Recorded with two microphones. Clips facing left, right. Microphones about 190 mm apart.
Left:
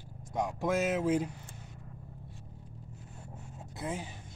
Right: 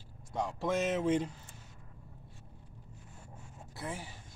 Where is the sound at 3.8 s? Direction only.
20° left (ahead or behind).